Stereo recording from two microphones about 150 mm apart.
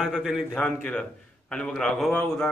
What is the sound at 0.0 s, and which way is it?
A man's voice, centre (ahead or behind).